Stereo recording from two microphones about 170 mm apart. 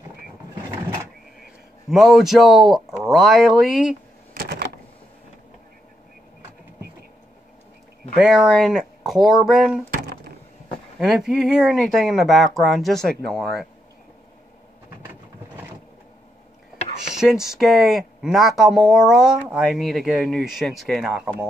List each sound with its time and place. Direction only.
1.9 s speech: centre (ahead or behind)
4.3 s a sound: 75° right (ahead or behind)
8.2 s speech: 5° right (ahead or behind)
11.0 s speech: 5° right (ahead or behind)
15.0 s a sound: 10° right (ahead or behind)
17.1 s speech: 5° right (ahead or behind)